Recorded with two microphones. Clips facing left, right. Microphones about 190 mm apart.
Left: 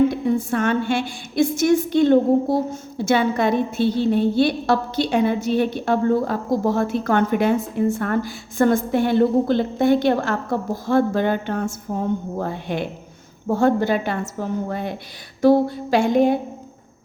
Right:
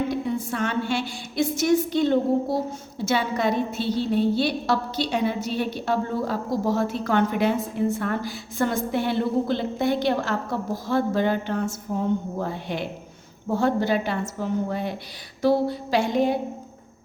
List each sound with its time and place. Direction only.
0.1 s a woman's voice: 55° left (ahead or behind)